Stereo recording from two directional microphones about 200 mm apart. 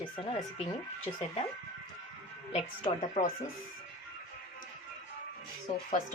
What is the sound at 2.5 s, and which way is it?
Speech, 30° left (ahead or behind).